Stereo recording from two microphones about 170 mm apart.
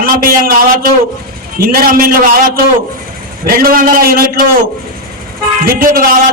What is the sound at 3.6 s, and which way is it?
Speech, 55° right (ahead or behind).